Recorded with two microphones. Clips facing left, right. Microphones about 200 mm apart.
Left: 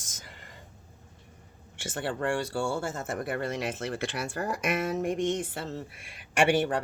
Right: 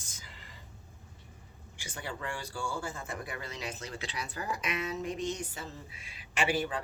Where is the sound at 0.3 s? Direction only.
55° left (ahead or behind).